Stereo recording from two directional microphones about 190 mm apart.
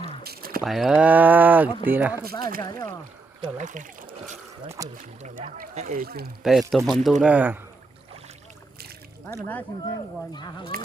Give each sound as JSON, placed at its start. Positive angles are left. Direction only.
{"t": 0.2, "sound": "a sound", "side_deg": -50}
{"t": 0.6, "sound": "speech", "side_deg": 0}
{"t": 2.6, "sound": "speech", "side_deg": 15}
{"t": 3.6, "sound": "speech", "side_deg": -40}
{"t": 4.8, "sound": "speech", "side_deg": -20}
{"t": 5.2, "sound": "speech", "side_deg": -40}
{"t": 6.4, "sound": "speech", "side_deg": 0}
{"t": 9.2, "sound": "speech", "side_deg": 10}
{"t": 10.3, "sound": "speech", "side_deg": 25}